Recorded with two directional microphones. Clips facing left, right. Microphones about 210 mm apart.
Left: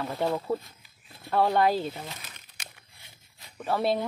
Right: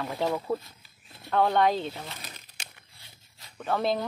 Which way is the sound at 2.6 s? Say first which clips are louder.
Even; 30° right (ahead or behind).